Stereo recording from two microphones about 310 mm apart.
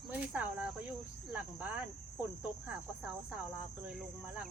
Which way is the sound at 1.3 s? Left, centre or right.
Centre.